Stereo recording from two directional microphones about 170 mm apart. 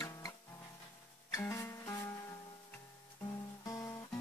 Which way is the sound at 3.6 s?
20° left (ahead or behind).